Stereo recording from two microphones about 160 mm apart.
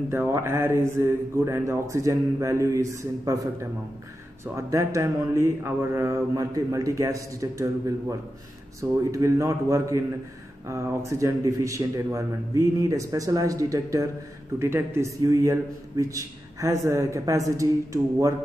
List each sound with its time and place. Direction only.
0.1 s speech: 15° right (ahead or behind)
4.6 s a man's voice: 20° right (ahead or behind)